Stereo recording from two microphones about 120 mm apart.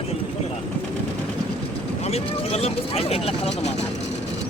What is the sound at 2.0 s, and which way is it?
Speech, 60° left (ahead or behind).